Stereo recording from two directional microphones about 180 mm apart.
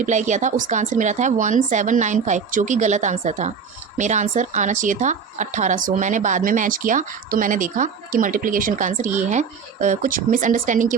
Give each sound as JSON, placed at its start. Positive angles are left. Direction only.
{"t": 0.0, "sound": "speech", "side_deg": -40}